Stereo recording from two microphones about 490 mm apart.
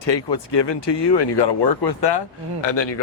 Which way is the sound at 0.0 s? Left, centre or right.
Left.